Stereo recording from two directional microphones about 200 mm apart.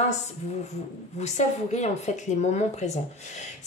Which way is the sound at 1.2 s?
35° left (ahead or behind).